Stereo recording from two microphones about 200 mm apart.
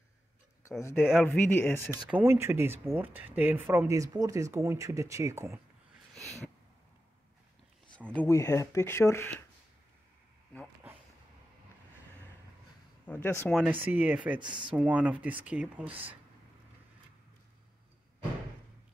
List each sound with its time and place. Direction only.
0.7 s speech: 15° left (ahead or behind)
2.0 s speech: 10° right (ahead or behind)
6.1 s a sound: centre (ahead or behind)
8.1 s speech: 10° left (ahead or behind)
13.0 s speech: 10° left (ahead or behind)
13.5 s speech: 5° right (ahead or behind)
14.4 s speech: 25° right (ahead or behind)
14.7 s speech: 5° right (ahead or behind)